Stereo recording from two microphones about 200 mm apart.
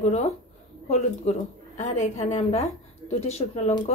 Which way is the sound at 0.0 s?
35° left (ahead or behind).